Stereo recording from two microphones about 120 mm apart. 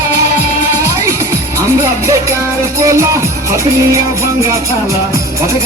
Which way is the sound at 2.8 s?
25° right (ahead or behind).